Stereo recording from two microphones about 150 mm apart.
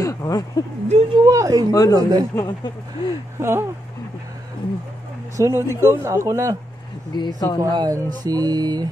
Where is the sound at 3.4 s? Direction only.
15° right (ahead or behind).